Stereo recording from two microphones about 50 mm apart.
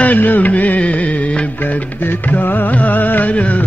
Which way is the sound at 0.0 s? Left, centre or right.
Left.